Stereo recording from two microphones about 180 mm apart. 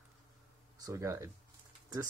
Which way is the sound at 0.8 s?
15° right (ahead or behind).